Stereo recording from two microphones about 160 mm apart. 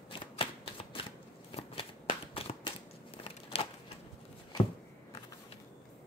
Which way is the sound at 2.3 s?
35° left (ahead or behind).